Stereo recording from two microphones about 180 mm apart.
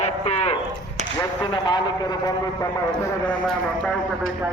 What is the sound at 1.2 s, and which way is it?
Speech, 25° left (ahead or behind).